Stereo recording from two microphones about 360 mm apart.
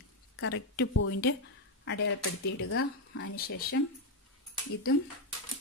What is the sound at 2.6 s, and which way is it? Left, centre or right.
Speech, left.